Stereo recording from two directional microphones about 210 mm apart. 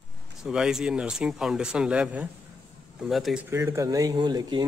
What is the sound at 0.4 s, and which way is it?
A man's voice, 5° right (ahead or behind).